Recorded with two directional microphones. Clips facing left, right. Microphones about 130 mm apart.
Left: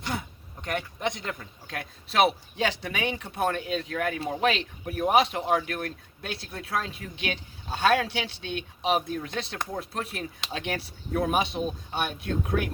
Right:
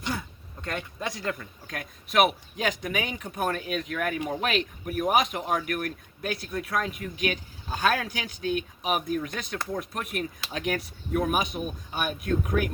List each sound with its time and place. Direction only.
0.1 s speech: 20° left (ahead or behind)